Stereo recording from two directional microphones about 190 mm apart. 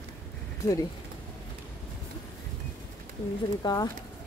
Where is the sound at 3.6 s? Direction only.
20° left (ahead or behind).